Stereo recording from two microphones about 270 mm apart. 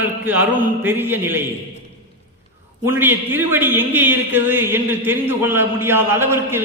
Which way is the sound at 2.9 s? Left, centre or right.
Centre.